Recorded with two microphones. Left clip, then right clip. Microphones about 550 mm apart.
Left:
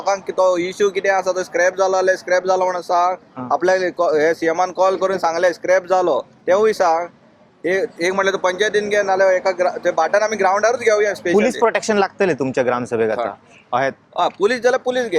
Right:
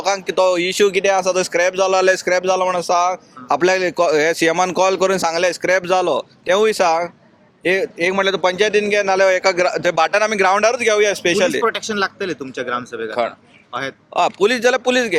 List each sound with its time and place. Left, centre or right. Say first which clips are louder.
0.0 s a man's voice: right 1 dB; right
1.0 s a man's voice: right 2 dB; right
2.4 s speech: right 1 dB; right
3.5 s a man's voice: right 1 dB; right
11.4 s a man's voice: left 1 dB; centre
14.1 s a man's voice: right 5 dB; right